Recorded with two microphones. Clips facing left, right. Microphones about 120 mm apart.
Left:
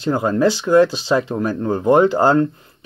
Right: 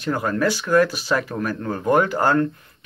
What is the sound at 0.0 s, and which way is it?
Speech, 25° left (ahead or behind).